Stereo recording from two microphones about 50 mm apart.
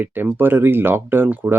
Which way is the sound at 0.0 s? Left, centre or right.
Right.